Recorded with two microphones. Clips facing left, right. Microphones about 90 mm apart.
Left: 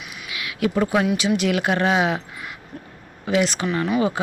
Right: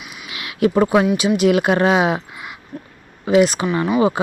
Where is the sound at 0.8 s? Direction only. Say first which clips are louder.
Right 5 dB; 30° right (ahead or behind).